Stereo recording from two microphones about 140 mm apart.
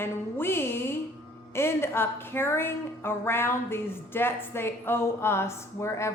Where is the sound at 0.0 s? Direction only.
15° left (ahead or behind).